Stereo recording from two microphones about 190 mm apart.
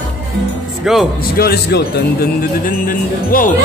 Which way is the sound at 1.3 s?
55° left (ahead or behind).